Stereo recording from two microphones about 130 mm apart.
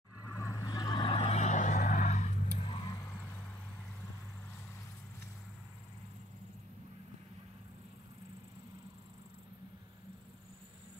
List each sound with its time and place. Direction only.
0.3 s vehicle: 25° left (ahead or behind)
1.1 s vehicle: 55° left (ahead or behind)
2.6 s vehicle: 40° left (ahead or behind)
3.1 s vehicle: 15° left (ahead or behind)